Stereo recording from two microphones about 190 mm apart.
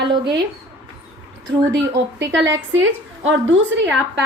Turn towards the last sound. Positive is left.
turn(degrees=-85)